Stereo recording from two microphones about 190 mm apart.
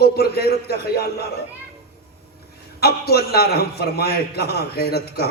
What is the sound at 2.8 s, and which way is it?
A man's voice, 55° left (ahead or behind).